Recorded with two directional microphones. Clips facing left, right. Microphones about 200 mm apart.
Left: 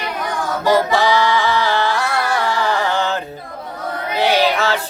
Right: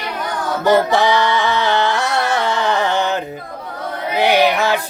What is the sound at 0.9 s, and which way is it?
Music, 20° right (ahead or behind).